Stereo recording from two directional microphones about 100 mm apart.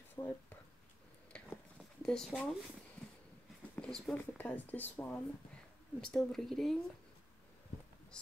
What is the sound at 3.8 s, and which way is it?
Speech, 5° left (ahead or behind).